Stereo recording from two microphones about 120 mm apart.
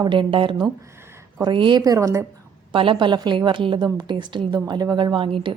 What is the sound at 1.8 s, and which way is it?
Speech, 25° right (ahead or behind).